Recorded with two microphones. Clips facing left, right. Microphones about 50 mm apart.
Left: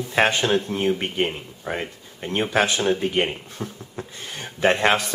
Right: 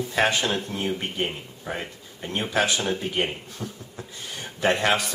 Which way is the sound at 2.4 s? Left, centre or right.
Centre.